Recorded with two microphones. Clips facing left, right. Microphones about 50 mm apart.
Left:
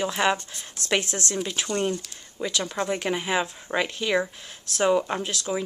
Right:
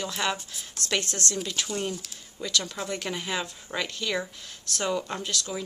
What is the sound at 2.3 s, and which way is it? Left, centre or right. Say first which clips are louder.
A woman's voice: left 3 dB; left.